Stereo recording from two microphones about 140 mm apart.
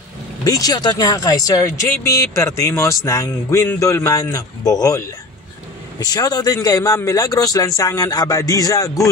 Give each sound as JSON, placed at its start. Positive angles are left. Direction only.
{"t": 0.4, "sound": "a man's voice", "side_deg": 25}